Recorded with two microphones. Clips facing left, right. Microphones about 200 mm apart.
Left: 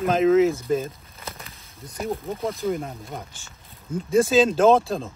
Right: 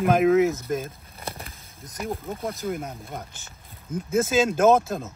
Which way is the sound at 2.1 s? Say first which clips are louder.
Left 3 dB; centre (ahead or behind).